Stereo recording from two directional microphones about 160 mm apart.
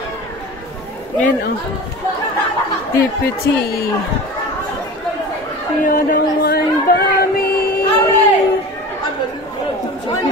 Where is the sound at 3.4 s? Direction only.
90° left.